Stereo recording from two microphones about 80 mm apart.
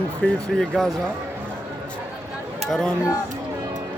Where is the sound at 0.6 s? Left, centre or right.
Centre.